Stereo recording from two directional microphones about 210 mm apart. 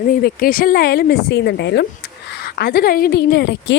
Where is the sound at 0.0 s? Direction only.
45° left (ahead or behind).